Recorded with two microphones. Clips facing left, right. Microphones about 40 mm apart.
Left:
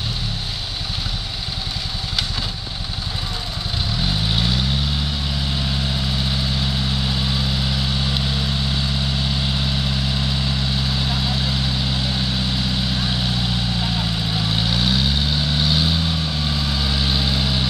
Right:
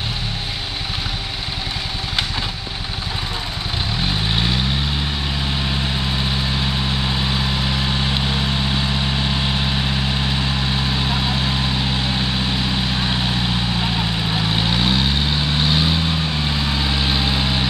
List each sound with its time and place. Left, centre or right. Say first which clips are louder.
4.0 s vehicle: right 1 dB; centre
5.7 s vehicle: right 2 dB; right